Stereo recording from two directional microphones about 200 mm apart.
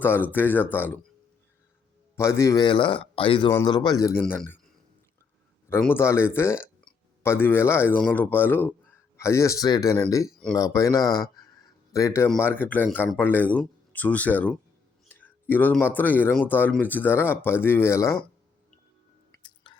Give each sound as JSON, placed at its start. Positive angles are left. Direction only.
{"t": 0.0, "sound": "speech", "side_deg": 10}
{"t": 2.1, "sound": "speech", "side_deg": 15}
{"t": 5.6, "sound": "speech", "side_deg": 10}
{"t": 19.6, "sound": "a sound", "side_deg": 25}